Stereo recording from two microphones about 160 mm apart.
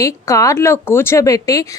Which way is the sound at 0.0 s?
20° left (ahead or behind).